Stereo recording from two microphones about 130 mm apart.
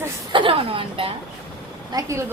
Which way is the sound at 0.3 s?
45° right (ahead or behind).